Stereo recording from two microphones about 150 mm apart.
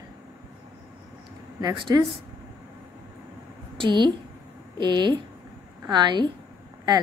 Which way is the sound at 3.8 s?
30° right (ahead or behind).